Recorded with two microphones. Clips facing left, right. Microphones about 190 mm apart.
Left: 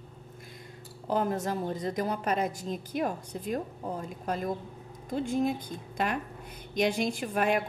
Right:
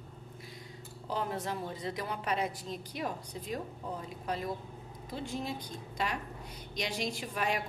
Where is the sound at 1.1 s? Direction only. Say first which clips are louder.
Left 6 dB; 45° left (ahead or behind).